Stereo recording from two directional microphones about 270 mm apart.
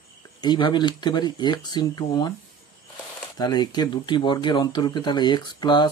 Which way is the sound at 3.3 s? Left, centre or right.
Centre.